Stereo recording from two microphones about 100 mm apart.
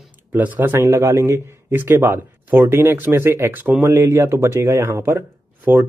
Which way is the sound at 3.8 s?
30° right (ahead or behind).